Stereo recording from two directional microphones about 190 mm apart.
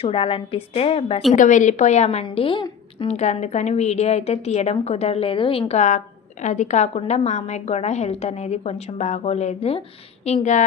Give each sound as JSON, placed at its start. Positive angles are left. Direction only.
{"t": 0.0, "sound": "a woman's voice", "side_deg": 30}
{"t": 1.3, "sound": "a woman's voice", "side_deg": 40}
{"t": 3.1, "sound": "a woman's voice", "side_deg": 35}